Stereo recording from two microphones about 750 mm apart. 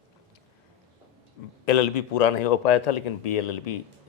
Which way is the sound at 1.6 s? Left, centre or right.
Left.